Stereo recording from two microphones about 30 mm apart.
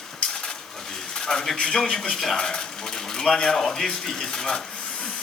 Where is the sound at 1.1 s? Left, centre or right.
Left.